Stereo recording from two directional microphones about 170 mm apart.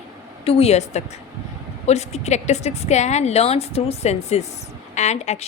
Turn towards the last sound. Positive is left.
turn(degrees=40)  # may be behind; listen again after turning